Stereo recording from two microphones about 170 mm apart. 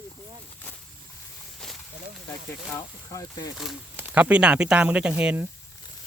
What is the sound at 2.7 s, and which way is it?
Speech, 20° left (ahead or behind).